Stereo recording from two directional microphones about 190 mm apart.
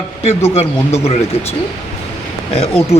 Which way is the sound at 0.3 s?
35° left (ahead or behind).